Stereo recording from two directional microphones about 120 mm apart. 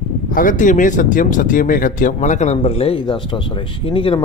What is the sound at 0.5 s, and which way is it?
Speech, 90° left.